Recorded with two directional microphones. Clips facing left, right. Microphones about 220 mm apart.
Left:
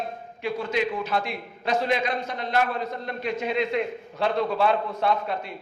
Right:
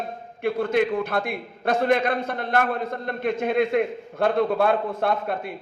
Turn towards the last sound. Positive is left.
turn(degrees=-55)  # may be behind; listen again after turning